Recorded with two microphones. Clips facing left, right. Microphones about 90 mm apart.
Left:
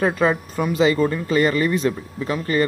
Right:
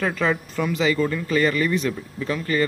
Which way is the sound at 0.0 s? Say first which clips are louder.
Left 4 dB; 25° left (ahead or behind).